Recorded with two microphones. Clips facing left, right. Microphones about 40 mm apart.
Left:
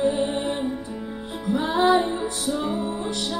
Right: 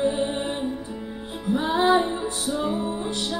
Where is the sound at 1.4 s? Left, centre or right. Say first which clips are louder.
Left 1 dB; centre.